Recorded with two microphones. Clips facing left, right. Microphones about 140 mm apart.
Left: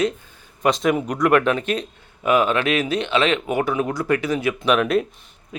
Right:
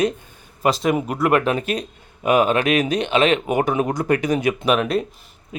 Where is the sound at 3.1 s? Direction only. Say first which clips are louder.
Right 3 dB; 20° right (ahead or behind).